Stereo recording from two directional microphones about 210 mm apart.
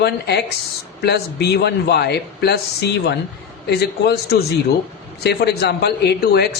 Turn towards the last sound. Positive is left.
turn(degrees=50)  # may be behind; listen again after turning